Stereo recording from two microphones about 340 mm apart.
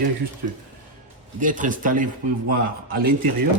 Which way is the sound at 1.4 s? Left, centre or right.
Right.